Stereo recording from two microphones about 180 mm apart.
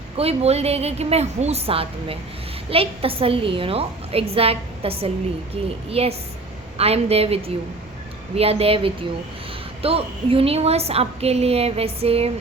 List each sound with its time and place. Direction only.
0.2 s a woman's voice: 35° right (ahead or behind)